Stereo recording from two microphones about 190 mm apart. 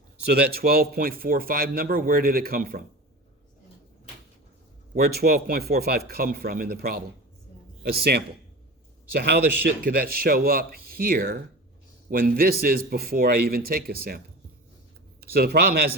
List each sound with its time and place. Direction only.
0.3 s speech: 55° right (ahead or behind)
4.9 s speech: 55° right (ahead or behind)
15.2 s speech: 55° right (ahead or behind)